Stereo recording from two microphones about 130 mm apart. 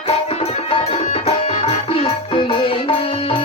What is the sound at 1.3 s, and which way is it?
Music, 50° left (ahead or behind).